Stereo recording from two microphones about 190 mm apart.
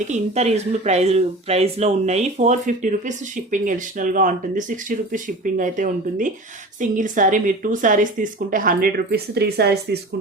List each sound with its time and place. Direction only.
0.1 s a woman's voice: 35° right (ahead or behind); by 10.0 s 60° right (ahead or behind)